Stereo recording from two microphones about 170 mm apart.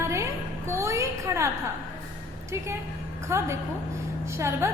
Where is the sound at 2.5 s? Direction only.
15° right (ahead or behind).